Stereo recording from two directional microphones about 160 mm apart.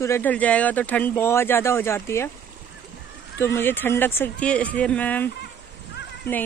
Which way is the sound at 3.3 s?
15° left (ahead or behind).